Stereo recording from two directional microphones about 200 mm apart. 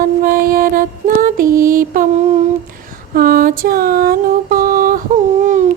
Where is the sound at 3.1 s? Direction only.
45° right (ahead or behind).